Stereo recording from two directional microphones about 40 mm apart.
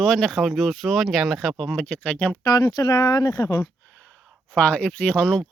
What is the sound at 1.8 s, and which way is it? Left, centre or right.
Speech, left.